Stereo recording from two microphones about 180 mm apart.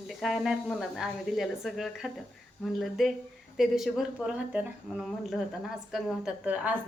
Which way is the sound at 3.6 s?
Centre (ahead or behind).